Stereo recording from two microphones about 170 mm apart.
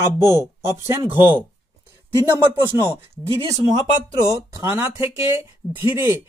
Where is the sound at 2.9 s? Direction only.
30° right (ahead or behind).